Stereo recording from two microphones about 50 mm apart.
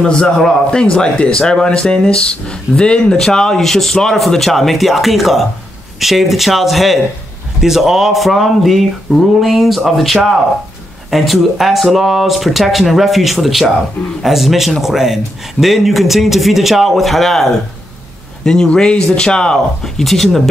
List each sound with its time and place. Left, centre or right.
0.0 s a man's voice: centre
18.4 s a man's voice: centre